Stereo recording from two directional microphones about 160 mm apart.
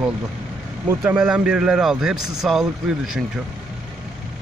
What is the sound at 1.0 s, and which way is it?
Speech, 5° right (ahead or behind).